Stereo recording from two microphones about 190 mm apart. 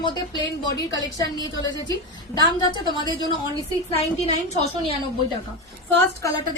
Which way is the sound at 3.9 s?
35° left (ahead or behind).